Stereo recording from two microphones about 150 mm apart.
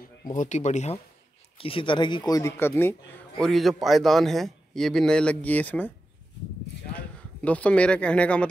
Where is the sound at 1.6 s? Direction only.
35° left (ahead or behind); by 2.9 s 15° left (ahead or behind).